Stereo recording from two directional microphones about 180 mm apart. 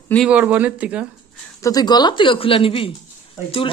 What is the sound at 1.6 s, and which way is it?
Speech, 20° left (ahead or behind).